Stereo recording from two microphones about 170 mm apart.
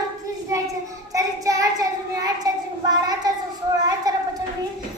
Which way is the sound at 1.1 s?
20° right (ahead or behind).